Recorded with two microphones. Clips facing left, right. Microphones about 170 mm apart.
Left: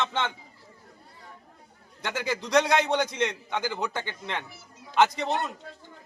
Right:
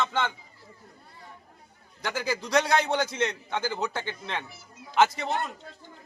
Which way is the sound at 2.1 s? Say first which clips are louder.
Even; centre (ahead or behind).